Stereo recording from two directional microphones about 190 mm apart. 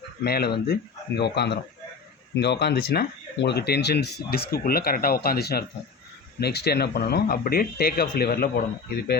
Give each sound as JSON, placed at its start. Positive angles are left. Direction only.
{"t": 0.3, "sound": "speech", "side_deg": 55}